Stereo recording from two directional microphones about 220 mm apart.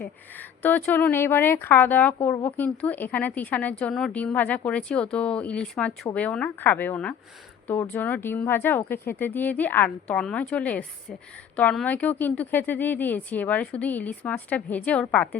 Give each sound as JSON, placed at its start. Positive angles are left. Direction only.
{"t": 0.3, "sound": "speech", "side_deg": 10}